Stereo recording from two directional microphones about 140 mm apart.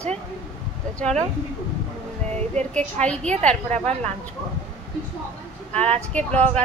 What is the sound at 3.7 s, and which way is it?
Speech, 50° right (ahead or behind).